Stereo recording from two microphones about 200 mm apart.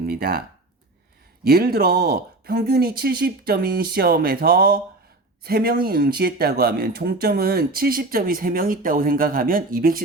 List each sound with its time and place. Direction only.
0.0 s speech: 50° right (ahead or behind)
1.5 s speech: 50° right (ahead or behind)